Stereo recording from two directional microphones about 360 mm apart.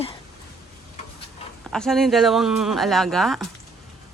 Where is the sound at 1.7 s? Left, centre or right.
Centre.